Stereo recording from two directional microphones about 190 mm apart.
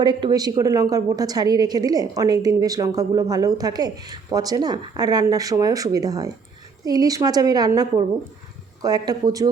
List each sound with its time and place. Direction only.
0.0 s a woman's voice: 25° right (ahead or behind)